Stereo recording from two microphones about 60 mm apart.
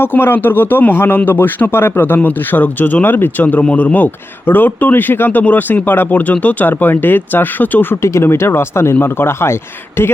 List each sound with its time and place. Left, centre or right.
0.0 s a man's voice: left
3.4 s a man's voice: left
8.0 s a man's voice: left